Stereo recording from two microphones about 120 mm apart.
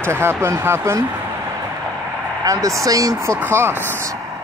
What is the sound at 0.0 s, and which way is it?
Speech, 20° right (ahead or behind).